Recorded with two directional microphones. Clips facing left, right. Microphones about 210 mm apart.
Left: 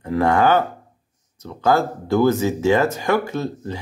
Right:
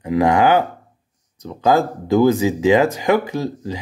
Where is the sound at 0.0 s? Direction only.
15° right (ahead or behind).